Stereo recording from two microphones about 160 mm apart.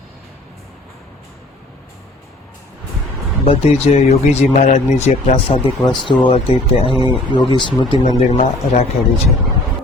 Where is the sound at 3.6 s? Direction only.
40° left (ahead or behind).